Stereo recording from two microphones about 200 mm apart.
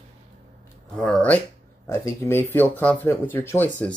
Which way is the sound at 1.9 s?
15° left (ahead or behind).